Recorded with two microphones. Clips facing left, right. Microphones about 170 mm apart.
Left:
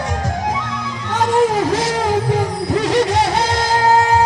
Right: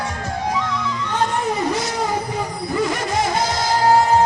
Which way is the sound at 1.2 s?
90° left.